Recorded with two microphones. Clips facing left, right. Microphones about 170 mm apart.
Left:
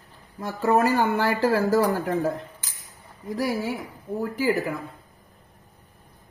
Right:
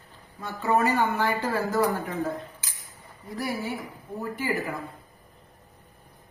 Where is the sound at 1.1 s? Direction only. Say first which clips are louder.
Left 5 dB; 85° left.